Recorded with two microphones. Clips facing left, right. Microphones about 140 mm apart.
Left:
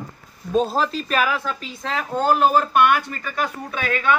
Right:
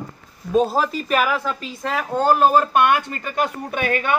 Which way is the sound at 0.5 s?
10° right (ahead or behind).